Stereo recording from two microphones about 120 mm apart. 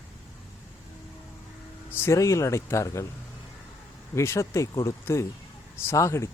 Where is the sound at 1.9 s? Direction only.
20° left (ahead or behind).